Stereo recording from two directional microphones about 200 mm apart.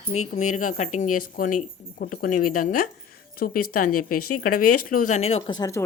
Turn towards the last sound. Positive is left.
turn(degrees=15)  # may be behind; listen again after turning